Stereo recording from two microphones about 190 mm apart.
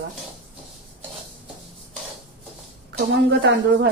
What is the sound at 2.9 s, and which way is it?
Speech, 65° right (ahead or behind).